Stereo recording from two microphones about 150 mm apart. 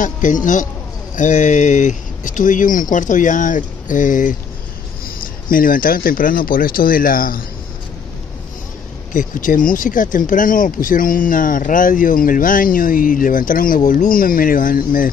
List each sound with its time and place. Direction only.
0.0 s speech: 60° left (ahead or behind)
5.5 s speech: 65° left (ahead or behind)
9.1 s speech: 60° left (ahead or behind)